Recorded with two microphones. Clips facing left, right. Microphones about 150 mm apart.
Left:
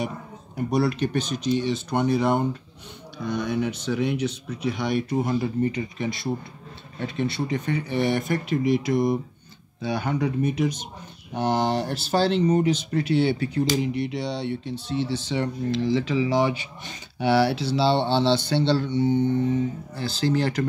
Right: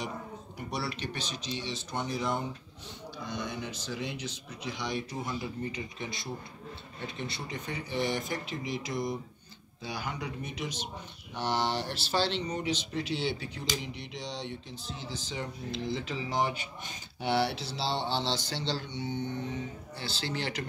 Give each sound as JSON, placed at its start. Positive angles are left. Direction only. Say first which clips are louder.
{"t": 0.6, "sound": "speech", "louder": "left 13 dB", "side_deg": 50}